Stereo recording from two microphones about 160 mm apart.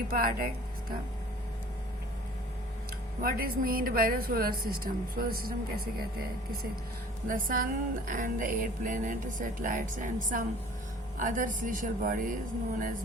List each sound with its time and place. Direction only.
0.1 s a woman's voice: 65° right (ahead or behind)
3.2 s a woman's voice: 65° right (ahead or behind)
7.3 s speech: 60° right (ahead or behind)